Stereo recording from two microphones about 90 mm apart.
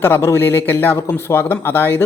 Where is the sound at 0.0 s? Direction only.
25° left (ahead or behind).